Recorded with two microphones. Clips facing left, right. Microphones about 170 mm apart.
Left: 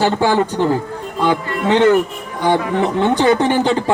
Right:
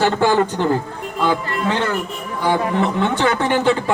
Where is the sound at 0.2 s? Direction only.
10° left (ahead or behind).